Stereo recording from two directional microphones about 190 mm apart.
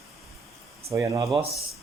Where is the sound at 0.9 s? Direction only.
15° right (ahead or behind).